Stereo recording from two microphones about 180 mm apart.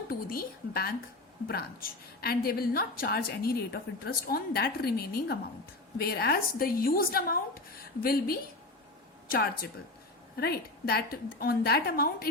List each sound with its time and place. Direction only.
0.1 s a woman's voice: 55° left (ahead or behind)